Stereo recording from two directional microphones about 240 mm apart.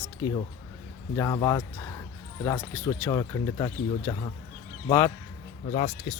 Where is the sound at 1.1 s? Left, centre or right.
Centre.